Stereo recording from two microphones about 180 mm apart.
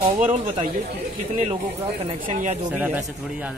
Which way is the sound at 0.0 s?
45° right (ahead or behind).